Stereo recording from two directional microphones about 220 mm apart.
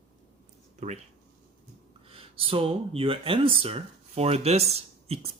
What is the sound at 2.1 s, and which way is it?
Speech, 25° right (ahead or behind).